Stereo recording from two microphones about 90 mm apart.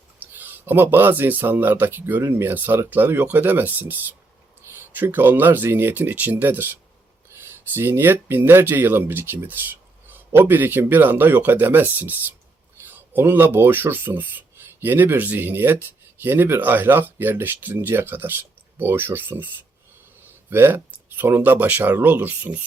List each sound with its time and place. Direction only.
0.2 s speech: 20° right (ahead or behind)
13.1 s speech: 25° right (ahead or behind)
20.5 s speech: 25° right (ahead or behind)